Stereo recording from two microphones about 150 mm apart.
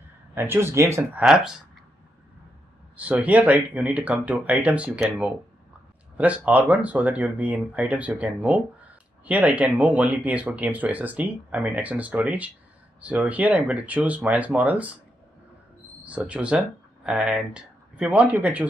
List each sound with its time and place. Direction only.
0.3 s speech: 15° right (ahead or behind)
1.2 s speech: centre (ahead or behind)
3.0 s speech: 10° right (ahead or behind)
16.0 s speech: 10° right (ahead or behind)